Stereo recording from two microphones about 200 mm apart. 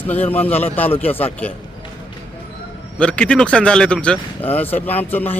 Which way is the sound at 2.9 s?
5° left (ahead or behind).